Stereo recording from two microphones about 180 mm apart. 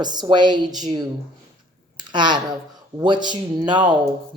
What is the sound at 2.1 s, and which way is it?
Speech, 25° right (ahead or behind).